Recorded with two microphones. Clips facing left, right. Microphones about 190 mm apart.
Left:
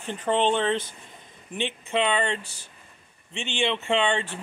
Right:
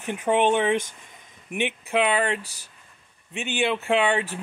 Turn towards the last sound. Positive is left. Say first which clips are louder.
# right 2 dB
turn(degrees=-5)  # may be behind; listen again after turning